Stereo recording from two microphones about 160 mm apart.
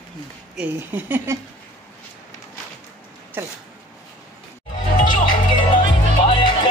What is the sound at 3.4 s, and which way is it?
Speech, 15° right (ahead or behind).